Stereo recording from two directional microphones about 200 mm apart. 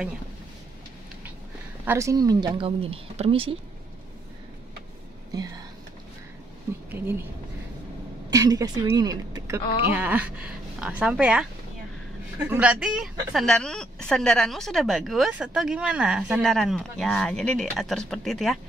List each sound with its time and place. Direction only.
1.9 s speech: 15° right (ahead or behind)
6.9 s speech: 10° right (ahead or behind)
8.3 s speech: 20° right (ahead or behind)
9.9 s a woman's voice: 10° right (ahead or behind)
12.4 s a woman's voice: 5° right (ahead or behind)